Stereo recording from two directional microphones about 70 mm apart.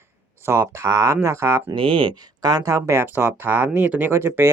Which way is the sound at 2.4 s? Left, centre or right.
Right.